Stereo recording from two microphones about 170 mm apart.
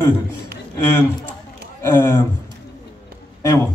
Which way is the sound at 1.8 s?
15° left (ahead or behind).